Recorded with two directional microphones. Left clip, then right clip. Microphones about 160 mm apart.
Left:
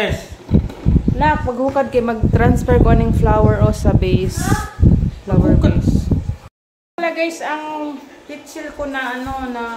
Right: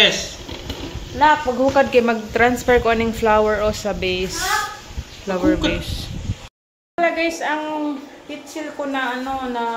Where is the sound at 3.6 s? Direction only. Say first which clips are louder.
Left 2 dB; 30° left (ahead or behind).